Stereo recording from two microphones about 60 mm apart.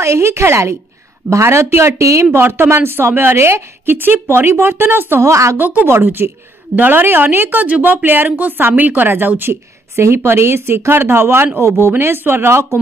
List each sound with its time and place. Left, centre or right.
0.0 s speech: right
2.3 s a woman's voice: right
5.2 s speech: right
5.6 s speech: right
5.9 s a woman's voice: right
9.4 s a woman's voice: right